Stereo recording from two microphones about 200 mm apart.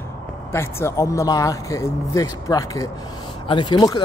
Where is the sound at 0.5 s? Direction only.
10° left (ahead or behind).